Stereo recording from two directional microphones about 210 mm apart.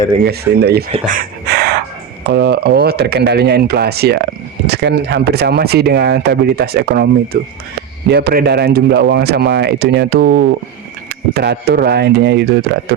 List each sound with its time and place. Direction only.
0.3 s speech: 50° right (ahead or behind)
1.0 s a sound: 40° right (ahead or behind)
2.3 s speech: 50° right (ahead or behind)